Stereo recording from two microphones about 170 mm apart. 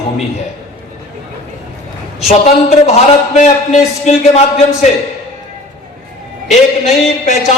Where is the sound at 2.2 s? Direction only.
40° left (ahead or behind).